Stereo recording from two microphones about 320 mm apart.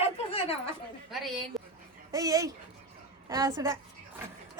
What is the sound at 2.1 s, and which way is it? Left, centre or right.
A woman's voice, centre.